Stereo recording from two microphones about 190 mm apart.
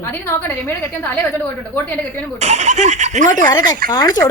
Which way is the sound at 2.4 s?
35° right (ahead or behind).